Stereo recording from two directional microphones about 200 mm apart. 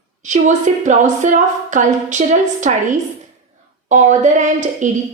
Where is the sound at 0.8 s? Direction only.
40° right (ahead or behind).